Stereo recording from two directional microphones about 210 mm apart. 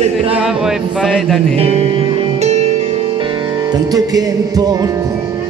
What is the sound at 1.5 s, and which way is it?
Music, 30° right (ahead or behind).